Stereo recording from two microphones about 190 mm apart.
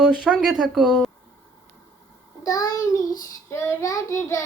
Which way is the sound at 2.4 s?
20° left (ahead or behind).